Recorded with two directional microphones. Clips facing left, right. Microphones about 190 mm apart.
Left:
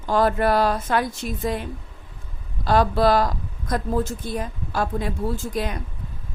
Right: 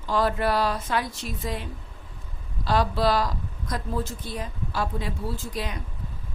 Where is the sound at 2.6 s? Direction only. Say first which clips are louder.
Left 5 dB; 50° left (ahead or behind).